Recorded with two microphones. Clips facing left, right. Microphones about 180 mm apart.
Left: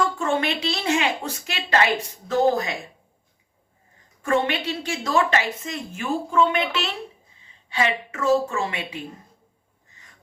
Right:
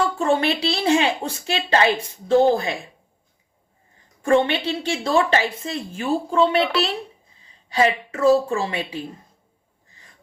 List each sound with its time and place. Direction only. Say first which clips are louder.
0.2 s a woman's voice: right 4 dB; 35° right (ahead or behind)
4.2 s a woman's voice: right 4 dB; 30° right (ahead or behind)